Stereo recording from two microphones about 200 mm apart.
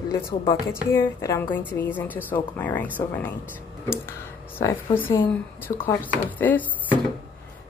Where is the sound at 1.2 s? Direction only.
15° left (ahead or behind).